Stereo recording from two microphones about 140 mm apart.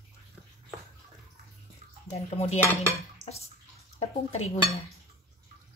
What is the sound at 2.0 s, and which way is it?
Speech, 50° left (ahead or behind).